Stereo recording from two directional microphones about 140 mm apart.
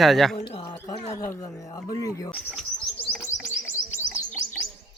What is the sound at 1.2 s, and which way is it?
Speech, 20° left (ahead or behind).